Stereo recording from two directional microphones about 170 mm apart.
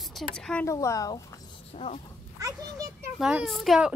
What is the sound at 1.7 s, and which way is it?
Speech, 35° left (ahead or behind).